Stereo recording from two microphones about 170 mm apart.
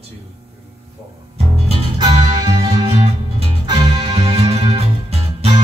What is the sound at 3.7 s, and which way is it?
Music, 25° right (ahead or behind).